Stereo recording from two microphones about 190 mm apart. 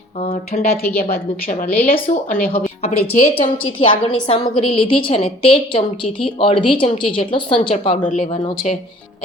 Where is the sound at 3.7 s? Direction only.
30° left (ahead or behind).